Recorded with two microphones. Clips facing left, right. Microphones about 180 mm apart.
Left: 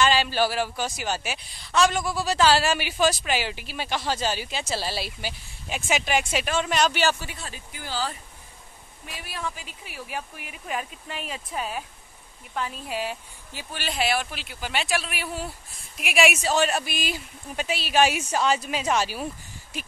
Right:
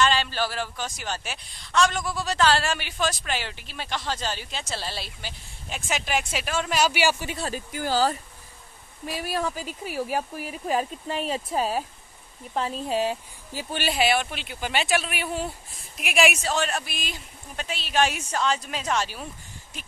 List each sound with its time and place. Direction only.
0.0 s a woman's voice: 5° left (ahead or behind); by 7.2 s 10° right (ahead or behind)
7.3 s speech: 40° right (ahead or behind)
13.8 s a woman's voice: centre (ahead or behind)